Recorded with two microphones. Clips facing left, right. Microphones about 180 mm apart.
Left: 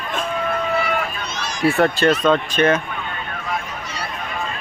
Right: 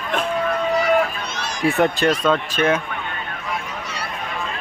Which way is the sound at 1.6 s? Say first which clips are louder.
Left 2 dB; 15° right (ahead or behind).